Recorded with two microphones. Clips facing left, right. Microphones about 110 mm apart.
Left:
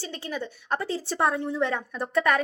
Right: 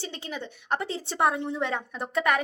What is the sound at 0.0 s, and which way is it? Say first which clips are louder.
A woman's voice: left 3 dB; 20° right (ahead or behind).